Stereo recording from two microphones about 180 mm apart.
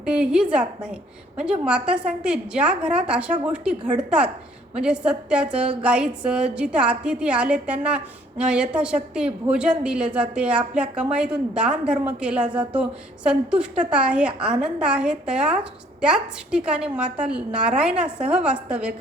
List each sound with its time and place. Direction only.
0.0 s a woman's voice: 5° right (ahead or behind)